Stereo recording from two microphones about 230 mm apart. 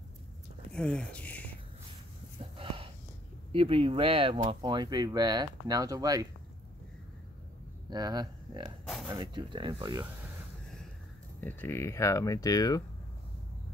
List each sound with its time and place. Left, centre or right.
0.7 s whispering: centre
2.5 s a sound: right
3.5 s speech: right
7.9 s speech: centre
11.4 s speech: centre